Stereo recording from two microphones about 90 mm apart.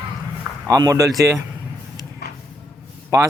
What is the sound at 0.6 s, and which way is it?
Speech, 40° right (ahead or behind).